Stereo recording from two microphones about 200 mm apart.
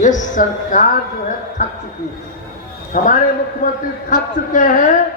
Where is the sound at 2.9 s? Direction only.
40° left (ahead or behind).